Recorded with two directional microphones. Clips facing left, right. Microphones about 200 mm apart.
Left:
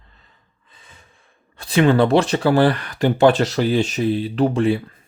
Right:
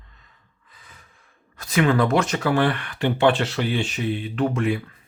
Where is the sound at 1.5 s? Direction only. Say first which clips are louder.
Left 4 dB; 30° left (ahead or behind).